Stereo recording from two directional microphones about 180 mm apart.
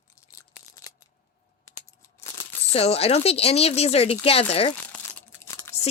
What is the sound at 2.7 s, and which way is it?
Speech, 35° left (ahead or behind).